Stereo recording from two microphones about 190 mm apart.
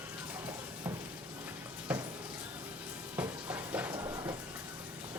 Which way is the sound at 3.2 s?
10° right (ahead or behind).